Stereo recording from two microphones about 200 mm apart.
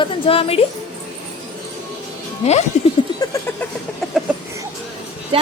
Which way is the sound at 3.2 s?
15° left (ahead or behind).